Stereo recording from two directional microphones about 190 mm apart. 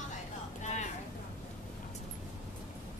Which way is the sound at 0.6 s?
40° left (ahead or behind).